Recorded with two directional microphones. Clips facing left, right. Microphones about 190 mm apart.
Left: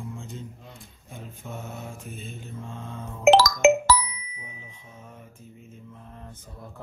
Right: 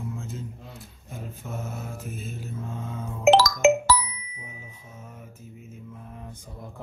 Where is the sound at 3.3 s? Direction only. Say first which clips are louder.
Left 1 dB; 60° left (ahead or behind).